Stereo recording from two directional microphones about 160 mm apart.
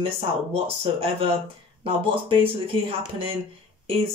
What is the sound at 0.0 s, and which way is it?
Speech, 35° right (ahead or behind).